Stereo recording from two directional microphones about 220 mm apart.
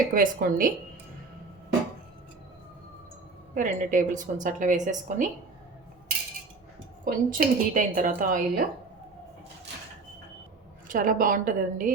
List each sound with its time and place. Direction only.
0.1 s a woman's voice: 40° right (ahead or behind)
3.5 s a woman's voice: 35° right (ahead or behind)
7.0 s a woman's voice: 40° right (ahead or behind)
10.8 s a woman's voice: 40° right (ahead or behind)